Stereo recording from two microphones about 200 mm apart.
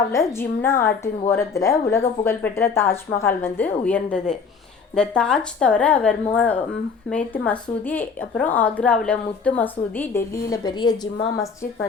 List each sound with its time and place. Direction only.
0.1 s a woman's voice: 15° left (ahead or behind)